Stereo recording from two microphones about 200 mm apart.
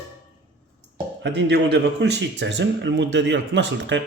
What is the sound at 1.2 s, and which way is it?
Speech, 60° right (ahead or behind).